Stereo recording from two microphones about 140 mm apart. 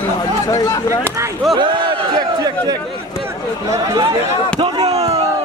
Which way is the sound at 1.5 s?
35° right (ahead or behind).